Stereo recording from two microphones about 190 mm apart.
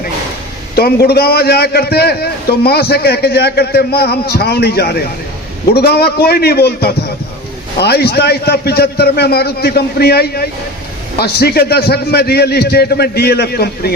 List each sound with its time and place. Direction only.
0.8 s a man's voice: 55° left (ahead or behind)